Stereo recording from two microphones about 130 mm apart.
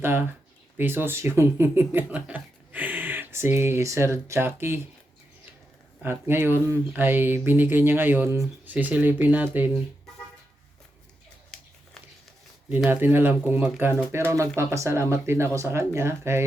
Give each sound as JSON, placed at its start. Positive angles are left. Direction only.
{"t": 0.0, "sound": "speech", "side_deg": -15}
{"t": 6.0, "sound": "speech", "side_deg": -20}
{"t": 12.6, "sound": "speech", "side_deg": -15}